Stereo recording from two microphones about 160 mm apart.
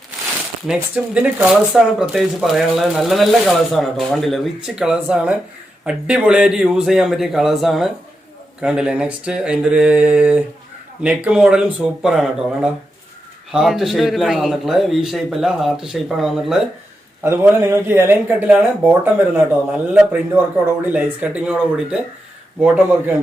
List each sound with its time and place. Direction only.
0.7 s speech: 10° right (ahead or behind)
17.2 s speech: 15° right (ahead or behind)